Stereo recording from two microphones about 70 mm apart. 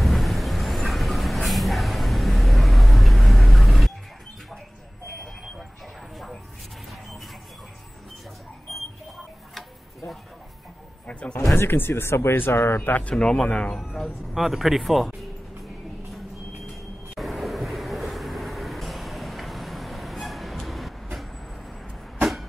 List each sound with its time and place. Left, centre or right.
0.0 s vehicle: centre
8.7 s a sound: centre
9.5 s tick-tock: centre
11.1 s a sound: centre
11.5 s speech: left
13.1 s speech: centre
13.7 s speech: centre
17.1 s vehicle: centre